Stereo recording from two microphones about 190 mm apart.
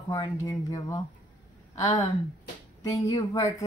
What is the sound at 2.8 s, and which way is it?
Speech, 20° left (ahead or behind).